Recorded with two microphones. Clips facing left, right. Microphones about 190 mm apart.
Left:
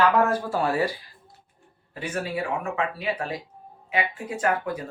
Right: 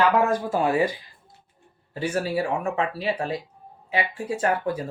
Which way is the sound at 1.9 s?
30° right (ahead or behind).